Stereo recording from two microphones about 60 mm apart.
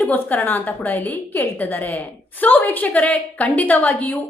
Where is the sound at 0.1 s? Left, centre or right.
Left.